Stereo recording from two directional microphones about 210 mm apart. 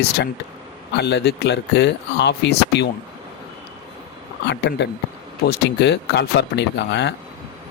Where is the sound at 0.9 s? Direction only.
55° left (ahead or behind).